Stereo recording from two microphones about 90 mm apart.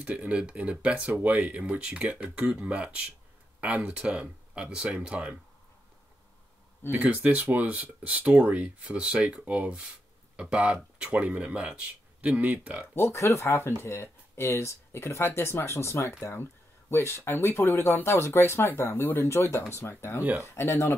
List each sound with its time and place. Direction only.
0.0 s speech: 15° right (ahead or behind)
7.0 s speech: 20° right (ahead or behind)
12.9 s speech: 30° left (ahead or behind)